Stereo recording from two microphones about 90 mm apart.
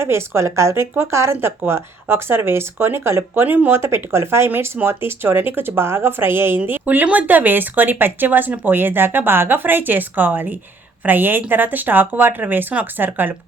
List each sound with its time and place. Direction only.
0.0 s speech: 30° right (ahead or behind)